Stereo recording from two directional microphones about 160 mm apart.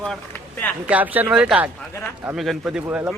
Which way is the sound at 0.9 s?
10° right (ahead or behind).